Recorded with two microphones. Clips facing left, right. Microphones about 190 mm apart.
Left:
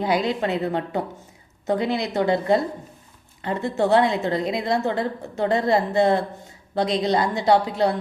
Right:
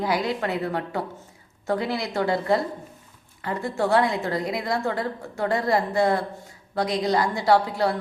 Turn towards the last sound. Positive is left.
turn(degrees=20)  # may be behind; listen again after turning